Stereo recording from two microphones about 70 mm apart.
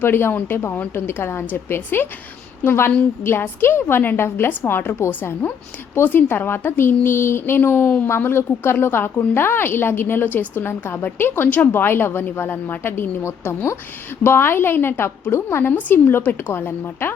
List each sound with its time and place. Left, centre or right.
0.0 s a woman's voice: left